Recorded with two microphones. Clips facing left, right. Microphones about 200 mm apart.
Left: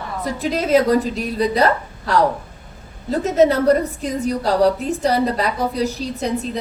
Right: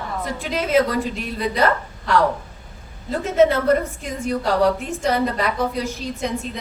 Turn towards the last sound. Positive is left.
turn(degrees=35)  # may be behind; listen again after turning